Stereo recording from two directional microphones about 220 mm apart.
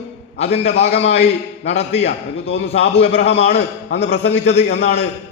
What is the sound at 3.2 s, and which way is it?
A man's voice, 30° left (ahead or behind).